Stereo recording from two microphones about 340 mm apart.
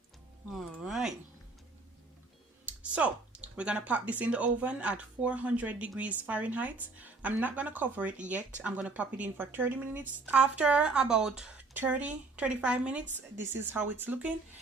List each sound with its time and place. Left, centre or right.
0.5 s speech: centre
2.6 s speech: centre